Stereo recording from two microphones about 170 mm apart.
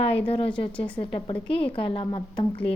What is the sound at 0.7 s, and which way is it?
Speech, 5° left (ahead or behind).